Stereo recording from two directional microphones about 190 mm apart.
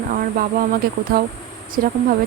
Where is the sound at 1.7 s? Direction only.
45° right (ahead or behind).